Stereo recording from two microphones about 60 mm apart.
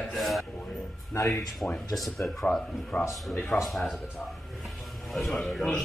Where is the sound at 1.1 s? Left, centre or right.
Left.